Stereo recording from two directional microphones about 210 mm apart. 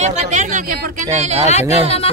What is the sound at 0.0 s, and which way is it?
Speech, 35° right (ahead or behind).